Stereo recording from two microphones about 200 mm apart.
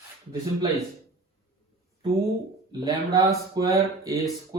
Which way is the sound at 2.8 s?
15° right (ahead or behind).